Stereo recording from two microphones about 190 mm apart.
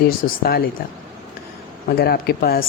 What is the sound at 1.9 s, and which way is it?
Speech, 55° left (ahead or behind).